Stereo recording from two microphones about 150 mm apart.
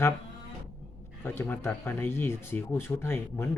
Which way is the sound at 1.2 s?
15° left (ahead or behind).